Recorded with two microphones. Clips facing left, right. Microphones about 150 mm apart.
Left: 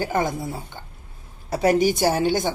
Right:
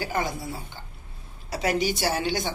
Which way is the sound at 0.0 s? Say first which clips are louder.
Left 5 dB; 50° left (ahead or behind).